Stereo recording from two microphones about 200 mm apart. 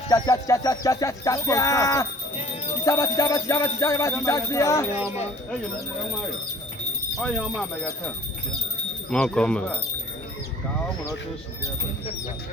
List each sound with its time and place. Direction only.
0.1 s music: 15° left (ahead or behind)
7.2 s speech: centre (ahead or behind)
9.0 s speech: 5° left (ahead or behind)